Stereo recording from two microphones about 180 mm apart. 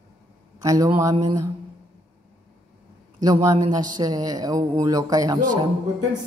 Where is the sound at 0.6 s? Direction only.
20° right (ahead or behind).